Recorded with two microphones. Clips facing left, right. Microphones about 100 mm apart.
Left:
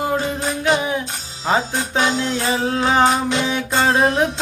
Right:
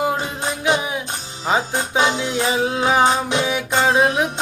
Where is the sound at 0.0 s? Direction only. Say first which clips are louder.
Left 1 dB; 15° right (ahead or behind).